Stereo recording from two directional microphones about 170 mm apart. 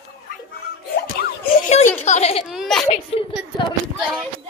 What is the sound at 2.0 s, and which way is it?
Speech, 40° left (ahead or behind).